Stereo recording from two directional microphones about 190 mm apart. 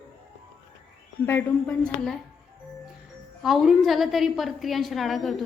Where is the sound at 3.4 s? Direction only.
Centre (ahead or behind).